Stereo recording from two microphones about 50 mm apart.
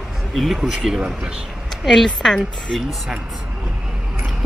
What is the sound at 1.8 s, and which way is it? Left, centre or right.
Speech, centre.